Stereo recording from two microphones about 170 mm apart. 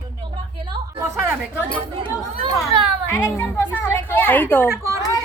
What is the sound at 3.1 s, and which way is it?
A woman's voice, 15° left (ahead or behind).